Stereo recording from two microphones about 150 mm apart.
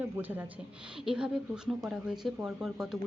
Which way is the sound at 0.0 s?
10° right (ahead or behind).